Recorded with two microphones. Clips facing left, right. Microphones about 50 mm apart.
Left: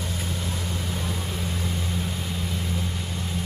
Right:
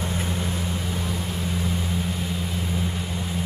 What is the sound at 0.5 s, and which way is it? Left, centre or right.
Vehicle, centre.